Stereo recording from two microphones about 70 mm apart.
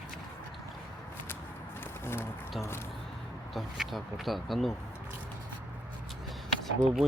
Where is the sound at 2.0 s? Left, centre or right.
Left.